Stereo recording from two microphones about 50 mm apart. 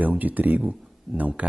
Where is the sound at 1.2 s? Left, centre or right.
Right.